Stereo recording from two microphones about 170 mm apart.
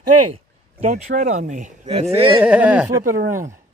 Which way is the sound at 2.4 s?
10° right (ahead or behind).